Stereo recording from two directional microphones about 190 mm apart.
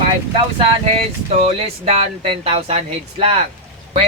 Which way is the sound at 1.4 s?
30° right (ahead or behind).